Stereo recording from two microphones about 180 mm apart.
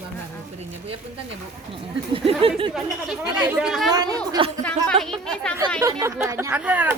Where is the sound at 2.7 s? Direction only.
5° right (ahead or behind).